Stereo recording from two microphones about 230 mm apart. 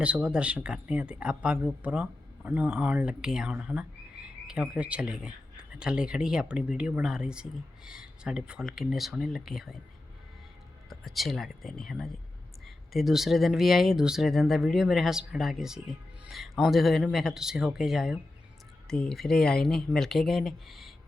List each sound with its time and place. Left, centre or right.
0.0 s speech: centre
10.8 s speech: centre